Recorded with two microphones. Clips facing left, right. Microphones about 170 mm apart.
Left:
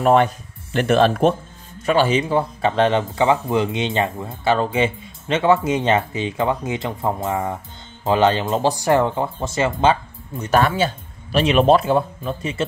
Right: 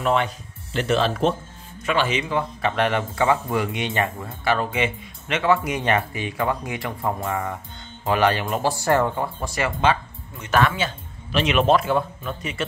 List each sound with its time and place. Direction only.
0.0 s speech: 45° left (ahead or behind)
1.9 s speech: 35° left (ahead or behind)